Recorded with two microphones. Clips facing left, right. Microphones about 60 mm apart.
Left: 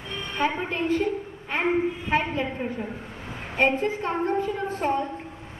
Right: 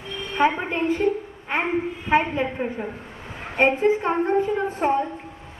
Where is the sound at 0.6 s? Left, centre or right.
Centre.